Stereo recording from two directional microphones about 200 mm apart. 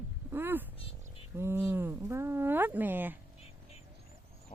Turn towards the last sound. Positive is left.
turn(degrees=-10)  # may be behind; listen again after turning